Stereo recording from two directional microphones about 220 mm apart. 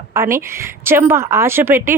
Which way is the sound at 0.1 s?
15° right (ahead or behind).